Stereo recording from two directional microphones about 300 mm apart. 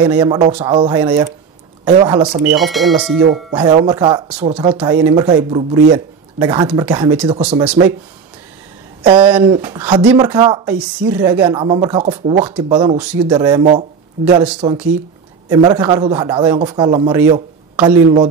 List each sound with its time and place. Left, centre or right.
0.1 s speech: centre
2.6 s speech: centre
3.5 s speech: centre
7.2 s speech: centre
9.0 s speech: centre